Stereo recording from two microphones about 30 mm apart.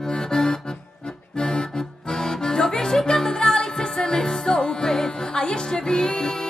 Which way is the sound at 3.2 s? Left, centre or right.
Left.